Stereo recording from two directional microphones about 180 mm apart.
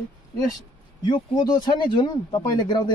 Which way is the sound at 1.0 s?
25° left (ahead or behind).